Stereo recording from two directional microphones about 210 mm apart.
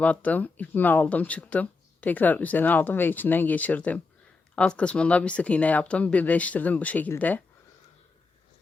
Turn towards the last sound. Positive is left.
turn(degrees=10)  # may be behind; listen again after turning